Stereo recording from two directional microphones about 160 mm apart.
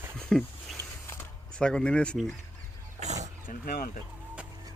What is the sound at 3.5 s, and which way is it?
Speech, 60° left (ahead or behind).